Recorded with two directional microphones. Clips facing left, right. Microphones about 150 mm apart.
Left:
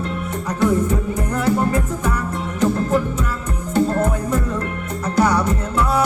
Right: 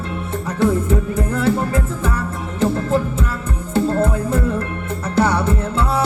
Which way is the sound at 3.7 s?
30° right (ahead or behind).